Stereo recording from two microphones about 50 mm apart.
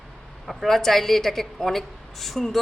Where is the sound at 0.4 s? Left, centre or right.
Centre.